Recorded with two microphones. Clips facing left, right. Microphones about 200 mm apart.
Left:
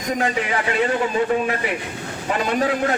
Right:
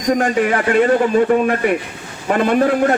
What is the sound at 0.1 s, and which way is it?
Speech, 50° right (ahead or behind).